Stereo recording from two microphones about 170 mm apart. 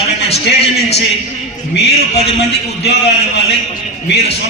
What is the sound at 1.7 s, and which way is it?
A man's voice, 75° left (ahead or behind).